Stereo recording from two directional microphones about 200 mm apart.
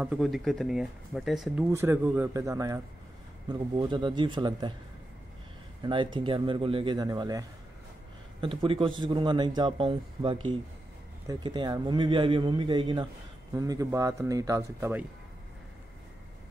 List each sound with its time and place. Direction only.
0.0 s a man's voice: centre (ahead or behind); by 4.7 s 20° right (ahead or behind)
5.9 s a man's voice: 25° right (ahead or behind)